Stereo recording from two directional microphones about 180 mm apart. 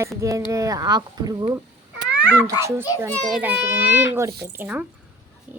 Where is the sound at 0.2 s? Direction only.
20° right (ahead or behind).